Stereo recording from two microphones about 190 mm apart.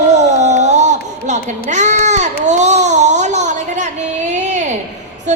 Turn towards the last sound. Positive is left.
turn(degrees=-40)  # may be behind; listen again after turning